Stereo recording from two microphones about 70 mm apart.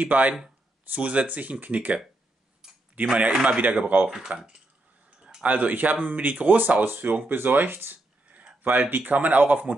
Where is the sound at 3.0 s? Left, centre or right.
Centre.